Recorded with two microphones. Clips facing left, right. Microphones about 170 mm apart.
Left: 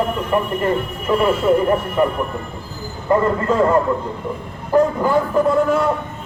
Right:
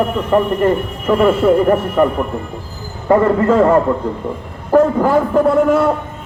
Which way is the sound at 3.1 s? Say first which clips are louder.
Right 5 dB; 65° right (ahead or behind).